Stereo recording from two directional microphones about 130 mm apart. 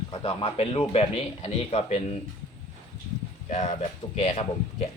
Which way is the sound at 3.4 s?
65° left (ahead or behind).